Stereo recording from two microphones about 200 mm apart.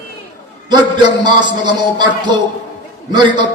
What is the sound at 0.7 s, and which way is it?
A man's voice, 20° right (ahead or behind).